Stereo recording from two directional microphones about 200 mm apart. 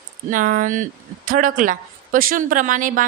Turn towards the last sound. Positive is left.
turn(degrees=-40)  # may be behind; listen again after turning